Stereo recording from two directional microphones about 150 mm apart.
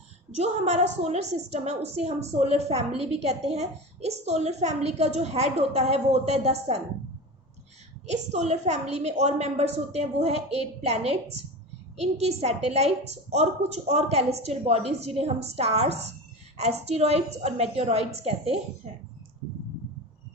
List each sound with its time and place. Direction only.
0.3 s a woman's voice: 45° right (ahead or behind)
8.1 s a woman's voice: 50° right (ahead or behind)